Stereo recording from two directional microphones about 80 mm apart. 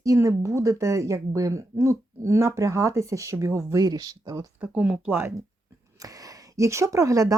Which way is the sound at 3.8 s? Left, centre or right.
Right.